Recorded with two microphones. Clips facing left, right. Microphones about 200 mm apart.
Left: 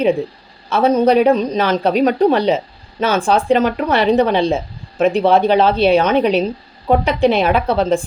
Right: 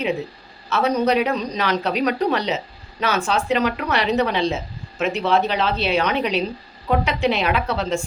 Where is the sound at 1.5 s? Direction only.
45° left (ahead or behind).